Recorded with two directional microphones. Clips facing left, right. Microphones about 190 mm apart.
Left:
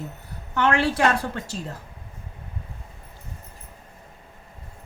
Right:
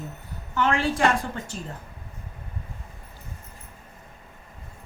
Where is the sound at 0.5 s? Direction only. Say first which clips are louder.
Left 2 dB; 70° left (ahead or behind).